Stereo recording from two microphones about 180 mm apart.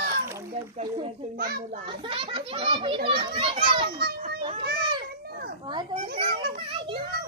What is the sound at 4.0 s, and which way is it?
Children playing, 60° right (ahead or behind).